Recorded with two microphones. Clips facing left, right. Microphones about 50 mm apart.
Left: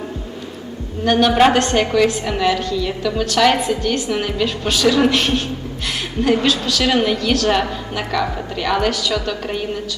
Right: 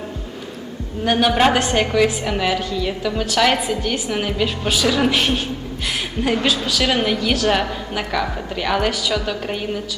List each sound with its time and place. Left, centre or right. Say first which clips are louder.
1.0 s a woman's voice: left 3 dB; centre